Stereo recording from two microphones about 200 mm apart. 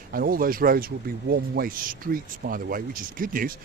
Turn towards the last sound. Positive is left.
turn(degrees=-45)  # may be behind; listen again after turning